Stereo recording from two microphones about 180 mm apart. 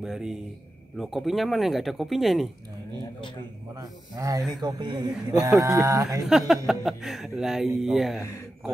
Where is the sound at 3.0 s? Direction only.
25° left (ahead or behind).